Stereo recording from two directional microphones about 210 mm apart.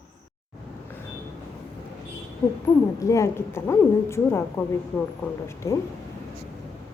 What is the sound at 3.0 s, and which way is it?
A woman's voice, 15° left (ahead or behind).